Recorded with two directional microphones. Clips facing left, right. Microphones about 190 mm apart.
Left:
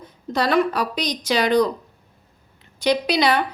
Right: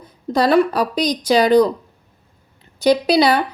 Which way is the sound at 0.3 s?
35° right (ahead or behind).